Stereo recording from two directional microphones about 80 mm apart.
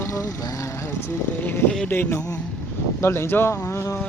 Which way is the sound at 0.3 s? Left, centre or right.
Left.